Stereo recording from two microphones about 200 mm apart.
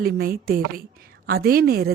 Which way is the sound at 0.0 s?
50° right (ahead or behind).